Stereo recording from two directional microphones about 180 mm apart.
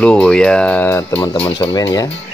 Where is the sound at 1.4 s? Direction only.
25° left (ahead or behind).